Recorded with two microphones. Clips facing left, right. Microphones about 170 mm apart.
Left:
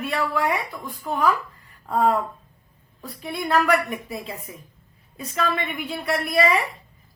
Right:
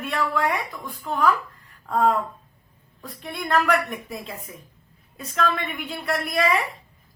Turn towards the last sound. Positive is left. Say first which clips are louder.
# left 2 dB
turn(degrees=0)  # may be behind; listen again after turning